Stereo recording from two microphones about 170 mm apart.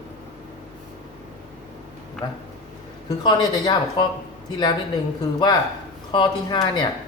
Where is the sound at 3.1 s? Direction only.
20° left (ahead or behind).